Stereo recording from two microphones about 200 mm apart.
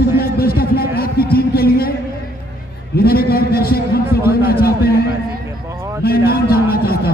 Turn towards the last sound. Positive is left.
turn(degrees=50)  # may be behind; listen again after turning